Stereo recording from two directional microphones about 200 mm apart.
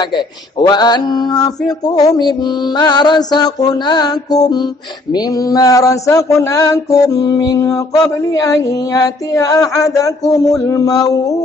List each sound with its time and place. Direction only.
0.1 s mantra: 20° left (ahead or behind)